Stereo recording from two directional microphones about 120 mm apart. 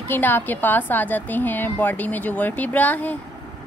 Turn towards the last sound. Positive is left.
turn(degrees=15)  # may be behind; listen again after turning